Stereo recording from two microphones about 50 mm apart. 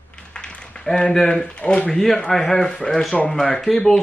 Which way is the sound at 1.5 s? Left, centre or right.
Left.